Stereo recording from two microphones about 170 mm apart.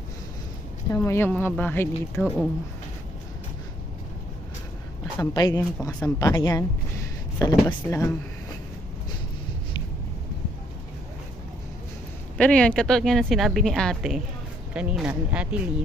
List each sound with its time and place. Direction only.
0.9 s speech: 15° left (ahead or behind)
5.2 s a woman's voice: 20° left (ahead or behind)
12.4 s a woman's voice: 5° left (ahead or behind)